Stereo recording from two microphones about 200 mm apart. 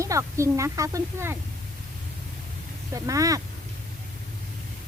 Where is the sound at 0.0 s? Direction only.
15° right (ahead or behind).